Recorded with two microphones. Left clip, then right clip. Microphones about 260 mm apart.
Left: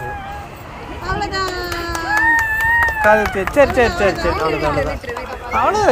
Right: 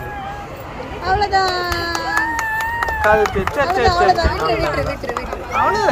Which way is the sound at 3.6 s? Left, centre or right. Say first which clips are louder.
Left 6 dB; left.